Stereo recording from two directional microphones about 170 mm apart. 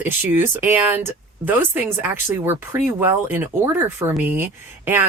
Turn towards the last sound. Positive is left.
turn(degrees=-10)  # may be behind; listen again after turning